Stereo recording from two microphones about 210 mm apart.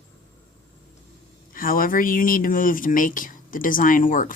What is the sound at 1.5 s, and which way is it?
Speech, 40° left (ahead or behind).